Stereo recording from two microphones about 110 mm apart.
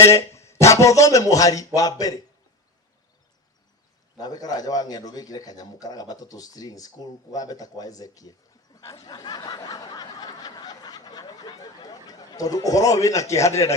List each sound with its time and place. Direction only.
0.0 s speech: 25° left (ahead or behind)
4.2 s a man's voice: 35° left (ahead or behind)
8.7 s snicker: 30° left (ahead or behind)